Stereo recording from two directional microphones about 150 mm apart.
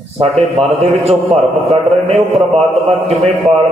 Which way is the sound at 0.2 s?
45° right (ahead or behind).